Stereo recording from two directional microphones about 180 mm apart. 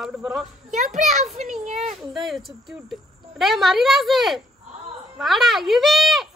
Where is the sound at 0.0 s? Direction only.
Centre (ahead or behind).